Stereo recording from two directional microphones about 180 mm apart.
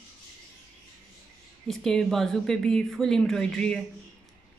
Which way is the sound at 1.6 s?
Centre (ahead or behind).